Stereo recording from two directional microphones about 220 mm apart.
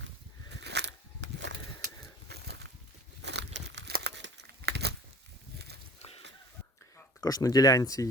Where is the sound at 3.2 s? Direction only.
50° right (ahead or behind).